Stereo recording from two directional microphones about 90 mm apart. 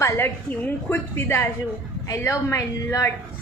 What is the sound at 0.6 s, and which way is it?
A woman's voice, 25° left (ahead or behind).